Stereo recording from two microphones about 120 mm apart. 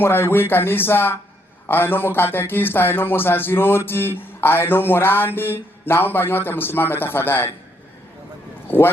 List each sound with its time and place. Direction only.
0.0 s speech: 20° left (ahead or behind)
1.6 s music: 20° left (ahead or behind)
8.6 s speech: 15° left (ahead or behind)